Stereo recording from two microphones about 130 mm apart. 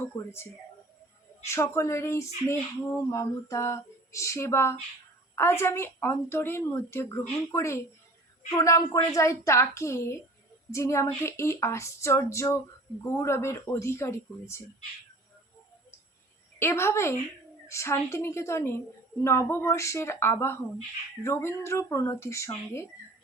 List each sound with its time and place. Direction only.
1.5 s speech: 20° left (ahead or behind)
16.6 s speech: 20° left (ahead or behind)